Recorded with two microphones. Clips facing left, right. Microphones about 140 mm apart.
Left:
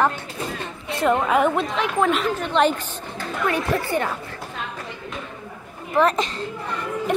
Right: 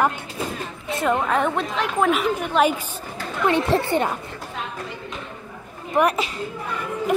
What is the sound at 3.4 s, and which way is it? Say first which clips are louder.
Speech: right 4 dB; 25° right (ahead or behind).